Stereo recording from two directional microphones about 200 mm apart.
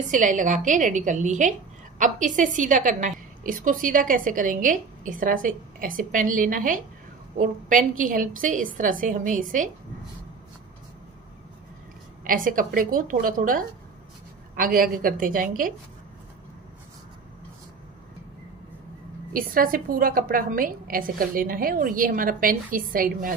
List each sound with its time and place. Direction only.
0.1 s a woman's voice: 40° right (ahead or behind)
12.3 s a woman's voice: 45° right (ahead or behind)
19.3 s a woman's voice: 45° right (ahead or behind)